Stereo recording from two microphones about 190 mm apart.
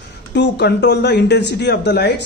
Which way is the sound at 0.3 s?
60° left (ahead or behind).